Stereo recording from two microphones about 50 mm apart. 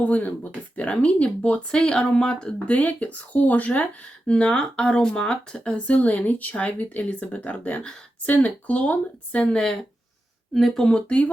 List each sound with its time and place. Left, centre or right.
0.0 s speech: left
2.6 s speech: left
4.3 s speech: centre
10.5 s speech: centre
10.8 s speech: left